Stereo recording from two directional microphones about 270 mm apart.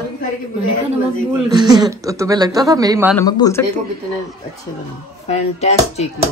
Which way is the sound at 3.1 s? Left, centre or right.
Centre.